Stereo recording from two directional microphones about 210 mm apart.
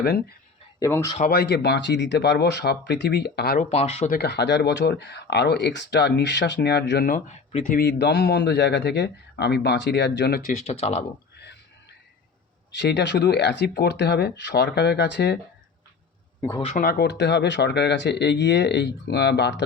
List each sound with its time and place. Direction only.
0.0 s speech: 45° left (ahead or behind)
0.8 s speech: 15° left (ahead or behind)
1.3 s speech: 50° left (ahead or behind)
3.7 s speech: 30° left (ahead or behind)
4.1 s speech: 50° left (ahead or behind)
10.7 s speech: 30° left (ahead or behind)
11.3 s whispering: 55° left (ahead or behind)
12.7 s speech: 55° left (ahead or behind)
16.4 s speech: 15° left (ahead or behind)
16.6 s speech: 40° left (ahead or behind)